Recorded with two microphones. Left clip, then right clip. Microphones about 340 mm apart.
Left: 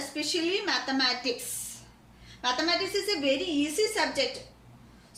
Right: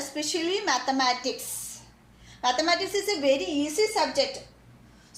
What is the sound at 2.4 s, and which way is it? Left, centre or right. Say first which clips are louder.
A woman's voice: right 3 dB; centre.